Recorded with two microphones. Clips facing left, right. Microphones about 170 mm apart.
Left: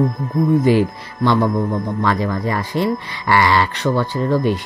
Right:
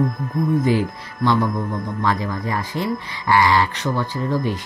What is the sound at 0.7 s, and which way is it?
Speech, 75° left (ahead or behind).